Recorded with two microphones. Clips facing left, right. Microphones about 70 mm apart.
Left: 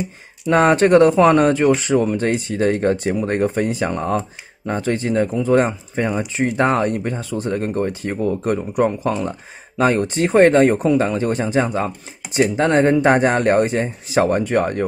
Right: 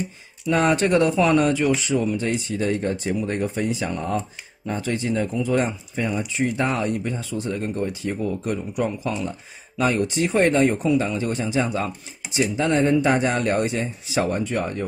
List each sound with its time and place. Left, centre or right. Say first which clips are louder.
0.5 s speech: left 6 dB; left
12.3 s speech: left 5 dB; left